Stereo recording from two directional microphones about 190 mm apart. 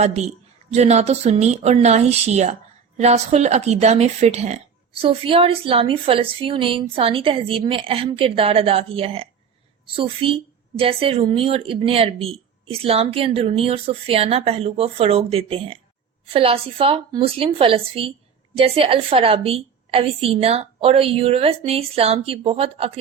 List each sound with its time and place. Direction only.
0.7 s a woman's voice: 35° right (ahead or behind)